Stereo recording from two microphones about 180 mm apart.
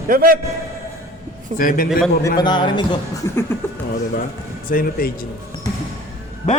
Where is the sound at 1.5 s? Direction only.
50° left (ahead or behind).